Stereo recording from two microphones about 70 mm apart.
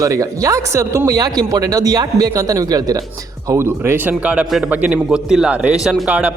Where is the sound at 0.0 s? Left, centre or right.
Right.